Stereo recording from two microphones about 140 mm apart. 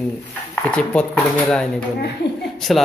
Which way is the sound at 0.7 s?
10° left (ahead or behind).